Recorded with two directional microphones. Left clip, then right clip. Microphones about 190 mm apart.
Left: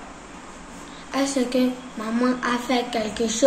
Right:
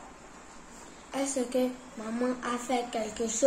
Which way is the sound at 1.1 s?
15° right (ahead or behind).